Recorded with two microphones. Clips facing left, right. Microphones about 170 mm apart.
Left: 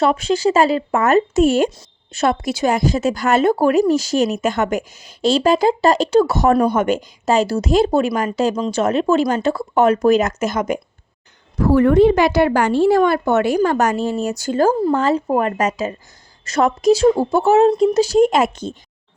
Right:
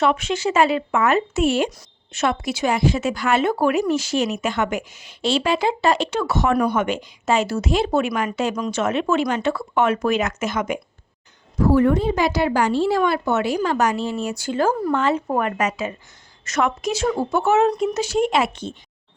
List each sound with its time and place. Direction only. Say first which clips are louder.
0.0 s speech: left 4 dB; 35° left (ahead or behind)
11.5 s speech: left 4 dB; 60° left (ahead or behind); by 18.8 s 45° left (ahead or behind)